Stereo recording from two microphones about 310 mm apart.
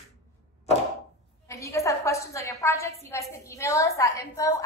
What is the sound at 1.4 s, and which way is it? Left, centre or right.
A woman's voice, centre.